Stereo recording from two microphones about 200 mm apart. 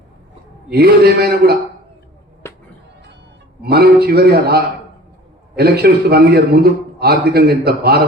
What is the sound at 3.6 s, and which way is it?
A man's voice, 50° right (ahead or behind).